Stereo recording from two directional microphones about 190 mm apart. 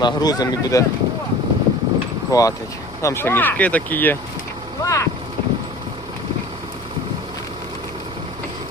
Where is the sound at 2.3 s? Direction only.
20° left (ahead or behind).